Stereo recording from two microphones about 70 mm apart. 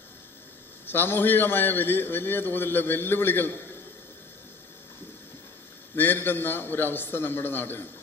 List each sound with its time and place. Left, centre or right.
0.9 s a man's voice: left
6.0 s a man's voice: left